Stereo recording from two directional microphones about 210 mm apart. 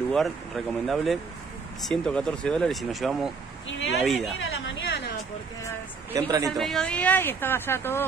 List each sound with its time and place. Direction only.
0.1 s speech: centre (ahead or behind)
4.4 s a sound: 65° left (ahead or behind)
6.1 s speech: 20° right (ahead or behind)
6.5 s speech: centre (ahead or behind)